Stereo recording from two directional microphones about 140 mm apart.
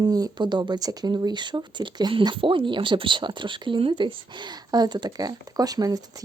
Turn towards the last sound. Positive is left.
turn(degrees=-25)  # may be behind; listen again after turning